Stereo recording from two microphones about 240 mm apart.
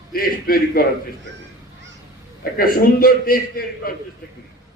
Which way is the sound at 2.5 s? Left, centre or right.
Left.